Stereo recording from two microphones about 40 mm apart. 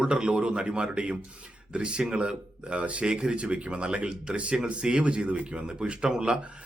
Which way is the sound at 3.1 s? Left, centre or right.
Right.